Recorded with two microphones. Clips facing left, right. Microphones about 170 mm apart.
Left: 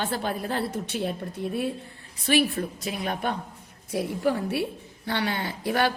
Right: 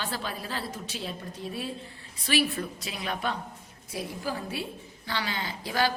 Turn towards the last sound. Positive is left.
turn(degrees=60)  # may be behind; listen again after turning